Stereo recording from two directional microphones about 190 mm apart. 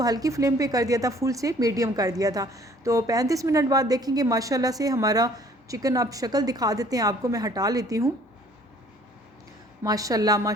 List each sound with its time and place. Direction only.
0.0 s speech: 20° right (ahead or behind)
9.8 s speech: 20° right (ahead or behind)